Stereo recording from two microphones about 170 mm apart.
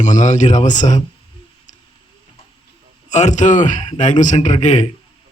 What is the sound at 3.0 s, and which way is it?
A man's voice, 45° left (ahead or behind).